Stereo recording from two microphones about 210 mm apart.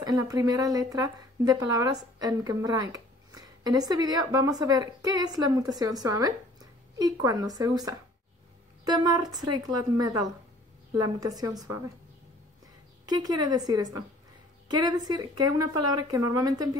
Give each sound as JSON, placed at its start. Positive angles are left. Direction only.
{"t": 0.0, "sound": "a woman's voice", "side_deg": -15}
{"t": 13.0, "sound": "a woman's voice", "side_deg": -20}
{"t": 14.7, "sound": "a woman's voice", "side_deg": -20}